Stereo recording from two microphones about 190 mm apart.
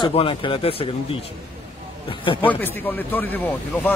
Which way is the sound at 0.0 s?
30° left (ahead or behind).